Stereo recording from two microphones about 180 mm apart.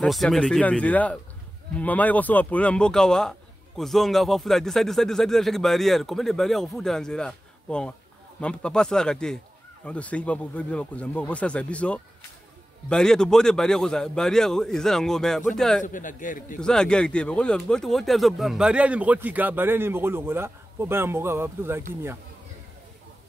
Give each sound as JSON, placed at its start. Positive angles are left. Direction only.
{"t": 0.0, "sound": "speech", "side_deg": 0}
{"t": 15.8, "sound": "a man's voice", "side_deg": 45}
{"t": 16.5, "sound": "speech", "side_deg": 5}